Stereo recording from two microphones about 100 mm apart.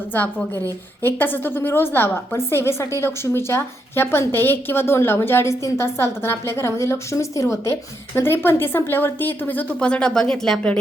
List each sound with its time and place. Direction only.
0.1 s a woman's voice: 20° left (ahead or behind)